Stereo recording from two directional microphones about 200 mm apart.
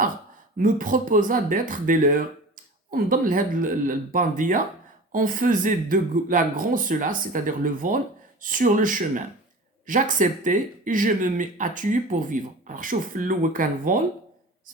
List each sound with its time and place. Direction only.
0.5 s speech: 40° right (ahead or behind)